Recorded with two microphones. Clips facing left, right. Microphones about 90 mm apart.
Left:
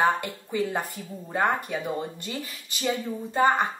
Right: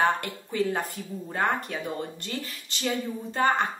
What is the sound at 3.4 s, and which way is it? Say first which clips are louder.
Speech: left 2 dB; 15° left (ahead or behind).